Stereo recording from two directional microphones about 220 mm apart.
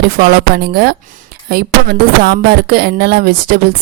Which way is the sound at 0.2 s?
45° right (ahead or behind).